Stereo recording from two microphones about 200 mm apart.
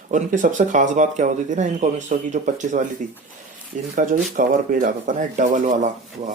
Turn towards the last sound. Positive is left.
turn(degrees=-40)  # may be behind; listen again after turning